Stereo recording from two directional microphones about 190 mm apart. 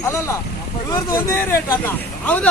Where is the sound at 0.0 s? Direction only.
15° left (ahead or behind).